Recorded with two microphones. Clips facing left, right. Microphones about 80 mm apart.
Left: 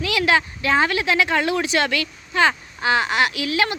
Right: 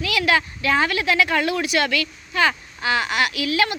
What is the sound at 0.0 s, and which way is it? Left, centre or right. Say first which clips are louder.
A woman's voice: left 1 dB; left.